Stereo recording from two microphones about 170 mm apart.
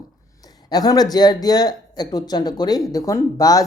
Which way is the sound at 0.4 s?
25° left (ahead or behind).